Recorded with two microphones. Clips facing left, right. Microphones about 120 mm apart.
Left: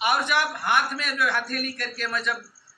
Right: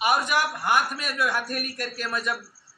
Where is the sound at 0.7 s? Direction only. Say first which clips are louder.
Right 1 dB; 30° right (ahead or behind).